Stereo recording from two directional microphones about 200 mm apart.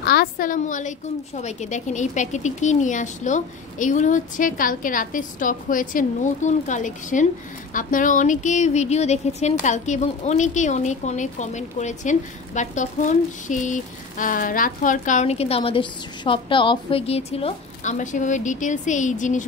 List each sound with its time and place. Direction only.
0.0 s a woman's voice: 50° left (ahead or behind)